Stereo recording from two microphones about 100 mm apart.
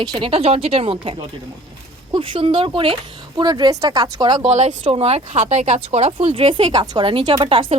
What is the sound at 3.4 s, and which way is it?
Speech, 45° right (ahead or behind).